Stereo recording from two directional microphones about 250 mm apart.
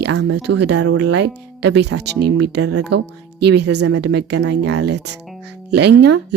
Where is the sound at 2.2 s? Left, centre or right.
Right.